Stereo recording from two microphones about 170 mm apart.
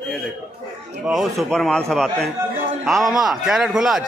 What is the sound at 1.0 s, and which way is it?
A man's voice, centre (ahead or behind).